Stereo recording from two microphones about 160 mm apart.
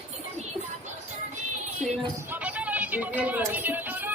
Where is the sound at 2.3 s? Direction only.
10° right (ahead or behind).